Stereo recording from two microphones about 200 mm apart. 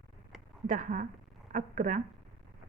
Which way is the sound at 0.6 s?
40° right (ahead or behind).